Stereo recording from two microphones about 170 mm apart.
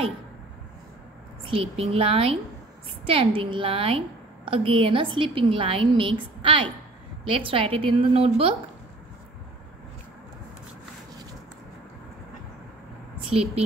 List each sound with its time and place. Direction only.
1.4 s a woman's voice: 30° right (ahead or behind)